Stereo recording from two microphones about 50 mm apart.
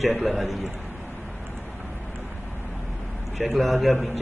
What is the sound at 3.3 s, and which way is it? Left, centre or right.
Speech, centre.